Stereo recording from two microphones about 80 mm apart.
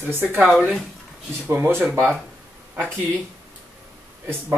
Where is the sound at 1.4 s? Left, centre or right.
Right.